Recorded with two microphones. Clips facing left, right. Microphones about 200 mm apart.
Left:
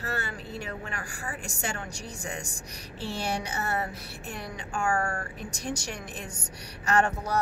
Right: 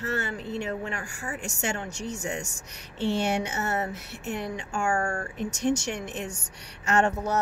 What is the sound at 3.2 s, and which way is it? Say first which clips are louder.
Speech: right 4 dB; 35° left (ahead or behind).